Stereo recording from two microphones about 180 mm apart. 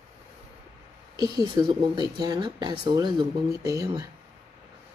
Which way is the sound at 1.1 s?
20° right (ahead or behind).